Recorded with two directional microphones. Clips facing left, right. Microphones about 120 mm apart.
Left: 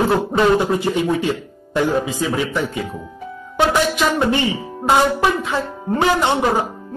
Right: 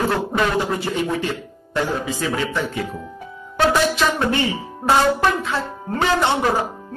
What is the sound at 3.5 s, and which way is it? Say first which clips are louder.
Music: left 1 dB; 15° left (ahead or behind).